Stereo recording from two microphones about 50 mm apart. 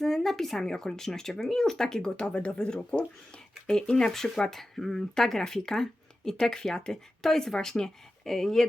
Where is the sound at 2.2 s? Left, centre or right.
Left.